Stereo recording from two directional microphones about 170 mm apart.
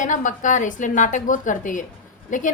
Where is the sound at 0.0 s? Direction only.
50° left (ahead or behind).